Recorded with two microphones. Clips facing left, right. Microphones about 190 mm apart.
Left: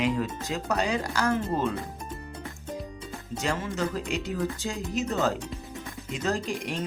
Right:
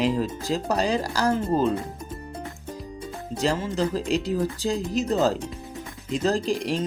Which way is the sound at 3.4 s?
35° right (ahead or behind).